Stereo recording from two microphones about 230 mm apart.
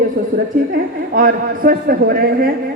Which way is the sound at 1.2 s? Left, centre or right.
Right.